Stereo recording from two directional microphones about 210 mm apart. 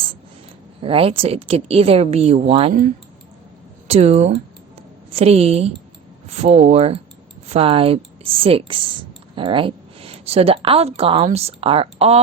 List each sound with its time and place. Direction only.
0.8 s speech: 25° right (ahead or behind)
3.8 s speech: 30° right (ahead or behind)